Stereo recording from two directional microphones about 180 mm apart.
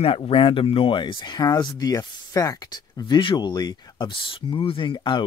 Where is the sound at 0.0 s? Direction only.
30° left (ahead or behind).